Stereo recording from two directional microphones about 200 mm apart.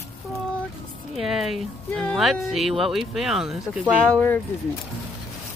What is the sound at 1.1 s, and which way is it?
Speech, centre (ahead or behind).